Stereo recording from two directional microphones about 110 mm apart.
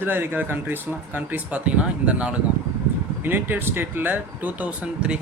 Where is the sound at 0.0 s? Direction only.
15° right (ahead or behind).